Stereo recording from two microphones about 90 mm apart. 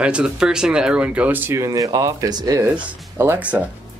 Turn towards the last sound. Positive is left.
turn(degrees=-15)  # may be behind; listen again after turning